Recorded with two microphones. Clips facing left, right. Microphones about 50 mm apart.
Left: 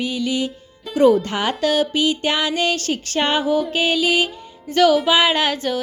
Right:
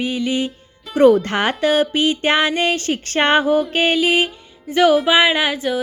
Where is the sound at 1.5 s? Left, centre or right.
Right.